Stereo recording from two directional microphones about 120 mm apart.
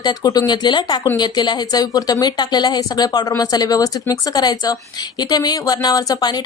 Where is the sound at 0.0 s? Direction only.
35° left (ahead or behind).